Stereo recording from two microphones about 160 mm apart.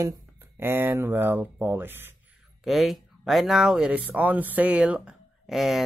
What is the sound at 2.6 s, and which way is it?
Speech, centre (ahead or behind).